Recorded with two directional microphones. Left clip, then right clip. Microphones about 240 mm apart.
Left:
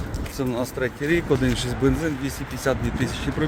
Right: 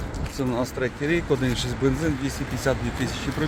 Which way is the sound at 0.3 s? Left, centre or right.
Centre.